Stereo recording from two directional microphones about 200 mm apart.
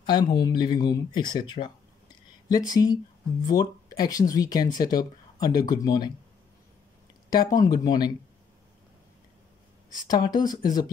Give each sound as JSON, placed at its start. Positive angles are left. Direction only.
{"t": 0.0, "sound": "speech", "side_deg": 20}
{"t": 2.7, "sound": "speech", "side_deg": 20}
{"t": 7.2, "sound": "speech", "side_deg": 20}
{"t": 10.0, "sound": "speech", "side_deg": 20}